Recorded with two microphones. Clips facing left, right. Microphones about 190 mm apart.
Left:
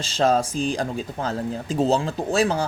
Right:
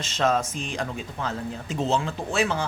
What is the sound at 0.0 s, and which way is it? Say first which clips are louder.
Speech: left 4 dB; 30° left (ahead or behind).